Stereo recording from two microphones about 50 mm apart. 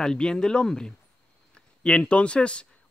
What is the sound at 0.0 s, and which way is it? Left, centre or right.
Speech, centre.